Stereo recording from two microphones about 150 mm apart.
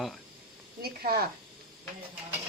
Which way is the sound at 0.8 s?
90° right.